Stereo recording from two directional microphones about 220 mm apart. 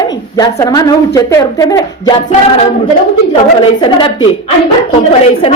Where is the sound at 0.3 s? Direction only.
15° left (ahead or behind).